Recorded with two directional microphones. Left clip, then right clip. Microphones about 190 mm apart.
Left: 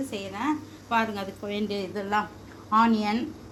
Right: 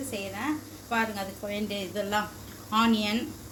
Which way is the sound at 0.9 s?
45° left (ahead or behind).